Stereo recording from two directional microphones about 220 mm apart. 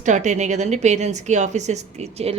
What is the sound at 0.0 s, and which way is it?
A woman's voice, 35° right (ahead or behind).